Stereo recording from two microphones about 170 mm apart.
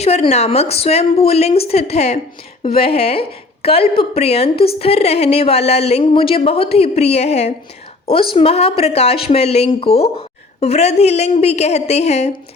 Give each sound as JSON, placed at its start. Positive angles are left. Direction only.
{"t": 0.0, "sound": "speech", "side_deg": 40}